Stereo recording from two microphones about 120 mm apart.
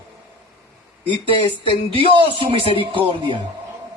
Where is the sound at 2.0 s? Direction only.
45° right (ahead or behind).